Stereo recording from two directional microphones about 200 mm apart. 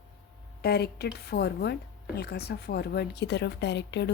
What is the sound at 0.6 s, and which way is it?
A woman's voice, 50° left (ahead or behind).